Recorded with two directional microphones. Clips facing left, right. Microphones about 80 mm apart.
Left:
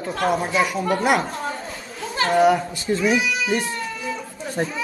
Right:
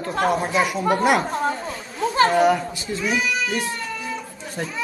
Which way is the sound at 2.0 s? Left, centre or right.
Right.